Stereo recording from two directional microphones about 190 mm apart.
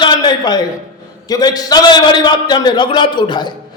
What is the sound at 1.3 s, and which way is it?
A man's voice, 20° left (ahead or behind).